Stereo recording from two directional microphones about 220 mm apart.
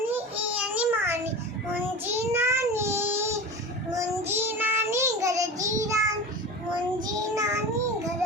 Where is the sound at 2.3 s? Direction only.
10° right (ahead or behind).